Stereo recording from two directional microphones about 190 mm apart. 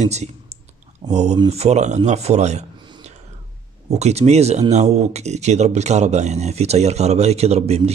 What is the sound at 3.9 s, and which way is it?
Speech, 35° right (ahead or behind).